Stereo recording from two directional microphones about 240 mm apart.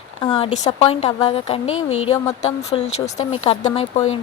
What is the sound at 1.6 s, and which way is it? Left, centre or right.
Speech, left.